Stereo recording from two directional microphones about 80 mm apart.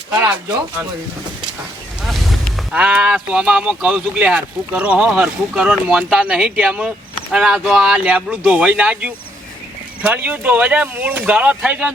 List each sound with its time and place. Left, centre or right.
2.0 s vehicle: centre
2.7 s speech: centre